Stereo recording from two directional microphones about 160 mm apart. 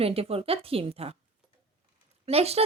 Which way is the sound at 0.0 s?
40° right (ahead or behind).